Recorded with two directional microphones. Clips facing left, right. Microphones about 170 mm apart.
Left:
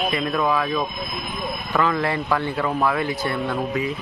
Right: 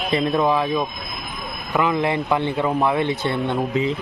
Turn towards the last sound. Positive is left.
turn(degrees=-25)  # may be behind; listen again after turning